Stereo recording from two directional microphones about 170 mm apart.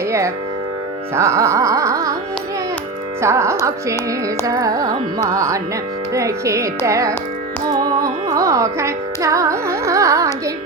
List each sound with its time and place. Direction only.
1.1 s carnatic music: 15° right (ahead or behind)
3.2 s speech: 15° right (ahead or behind)
4.4 s carnatic music: 20° right (ahead or behind)
6.1 s speech: 15° right (ahead or behind)
7.7 s carnatic music: 20° right (ahead or behind)